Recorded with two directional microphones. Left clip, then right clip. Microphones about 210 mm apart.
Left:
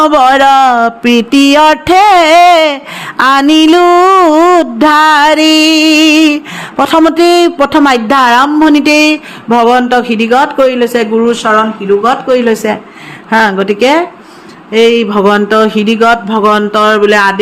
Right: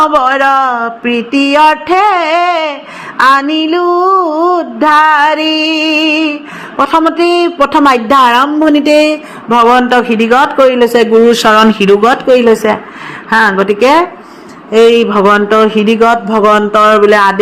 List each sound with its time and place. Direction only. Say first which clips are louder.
0.0 s a sound: left 3 dB; 45° left (ahead or behind)
8.0 s mantra: even; 25° left (ahead or behind)
9.5 s a man's voice: even; 25° left (ahead or behind)
10.8 s speech: right 3 dB; centre (ahead or behind)
11.4 s speech: left 2 dB; 40° right (ahead or behind)
12.3 s speech: right 4 dB; centre (ahead or behind)
13.3 s mantra: even; 25° left (ahead or behind)
14.7 s mantra: right 1 dB; 15° left (ahead or behind)